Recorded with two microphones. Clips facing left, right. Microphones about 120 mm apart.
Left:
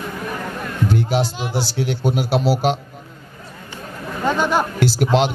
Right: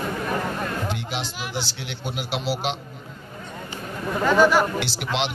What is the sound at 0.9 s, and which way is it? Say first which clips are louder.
Music: left 10 dB; 40° left (ahead or behind).